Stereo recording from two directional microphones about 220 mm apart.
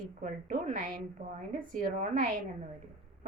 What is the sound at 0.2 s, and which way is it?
A woman's voice, 35° right (ahead or behind).